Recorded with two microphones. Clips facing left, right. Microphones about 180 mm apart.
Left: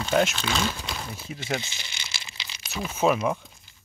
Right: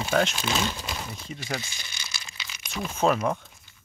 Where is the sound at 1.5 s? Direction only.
20° left (ahead or behind).